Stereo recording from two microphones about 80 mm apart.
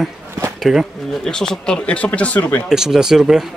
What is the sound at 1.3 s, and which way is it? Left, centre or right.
Speech, centre.